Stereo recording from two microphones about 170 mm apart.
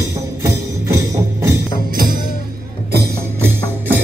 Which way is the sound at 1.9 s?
60° right (ahead or behind).